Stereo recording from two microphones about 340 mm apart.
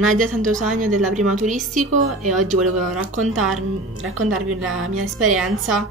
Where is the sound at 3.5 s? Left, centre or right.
Right.